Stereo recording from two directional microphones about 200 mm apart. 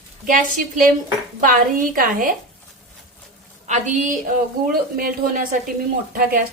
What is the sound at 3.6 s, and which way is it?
A woman's voice, 40° right (ahead or behind).